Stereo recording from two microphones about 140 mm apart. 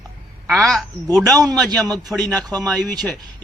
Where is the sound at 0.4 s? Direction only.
Centre (ahead or behind).